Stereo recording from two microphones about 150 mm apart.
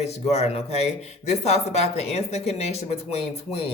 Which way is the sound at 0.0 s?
45° left (ahead or behind).